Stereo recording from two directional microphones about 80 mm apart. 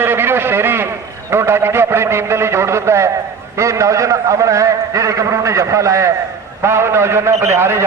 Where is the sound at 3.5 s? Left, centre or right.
Right.